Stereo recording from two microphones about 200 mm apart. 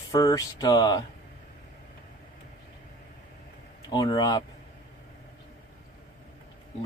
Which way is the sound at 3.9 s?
20° left (ahead or behind).